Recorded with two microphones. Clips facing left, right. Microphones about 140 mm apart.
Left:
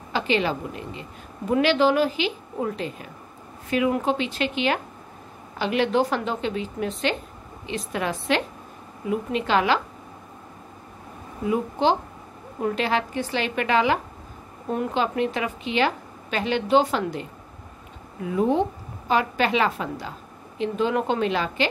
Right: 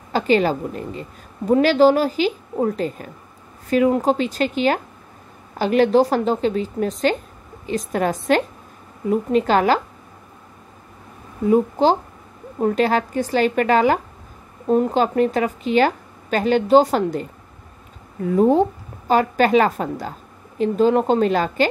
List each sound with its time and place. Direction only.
0.1 s a woman's voice: 45° right (ahead or behind)
11.4 s a woman's voice: 40° right (ahead or behind)